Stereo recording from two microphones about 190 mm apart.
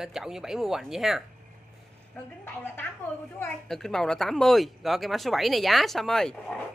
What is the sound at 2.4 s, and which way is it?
A woman's voice, 10° left (ahead or behind).